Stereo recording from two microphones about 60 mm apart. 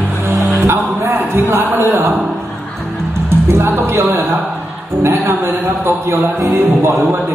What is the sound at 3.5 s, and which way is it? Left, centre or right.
A man's voice, right.